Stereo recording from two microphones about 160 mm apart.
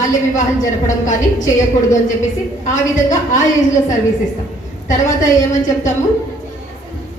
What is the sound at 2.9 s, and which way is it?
Speech, 50° left (ahead or behind).